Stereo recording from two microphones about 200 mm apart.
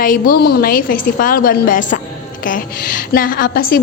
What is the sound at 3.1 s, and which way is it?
Speech, 45° left (ahead or behind).